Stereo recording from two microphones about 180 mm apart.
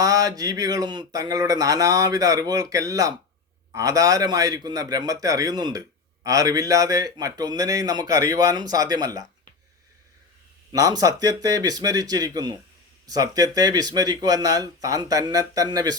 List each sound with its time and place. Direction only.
0.0 s speech: 20° right (ahead or behind)
10.7 s speech: 20° right (ahead or behind)